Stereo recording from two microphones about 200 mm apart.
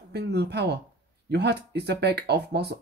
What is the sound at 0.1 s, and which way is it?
Speech, 55° right (ahead or behind).